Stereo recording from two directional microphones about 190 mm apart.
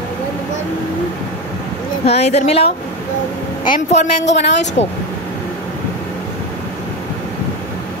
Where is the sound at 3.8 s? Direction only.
35° left (ahead or behind).